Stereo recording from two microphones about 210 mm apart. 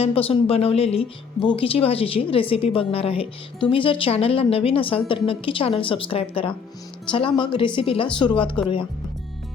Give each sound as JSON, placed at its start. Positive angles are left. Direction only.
{"t": 0.0, "sound": "a woman's voice", "side_deg": 30}